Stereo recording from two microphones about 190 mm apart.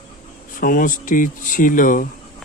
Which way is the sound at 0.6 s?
50° left (ahead or behind).